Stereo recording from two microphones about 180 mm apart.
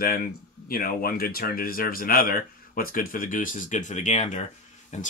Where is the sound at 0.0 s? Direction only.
55° left (ahead or behind).